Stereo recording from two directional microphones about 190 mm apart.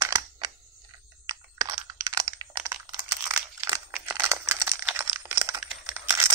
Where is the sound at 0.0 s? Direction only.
20° right (ahead or behind).